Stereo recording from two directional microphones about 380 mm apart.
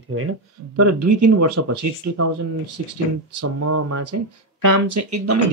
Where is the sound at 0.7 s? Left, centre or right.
Right.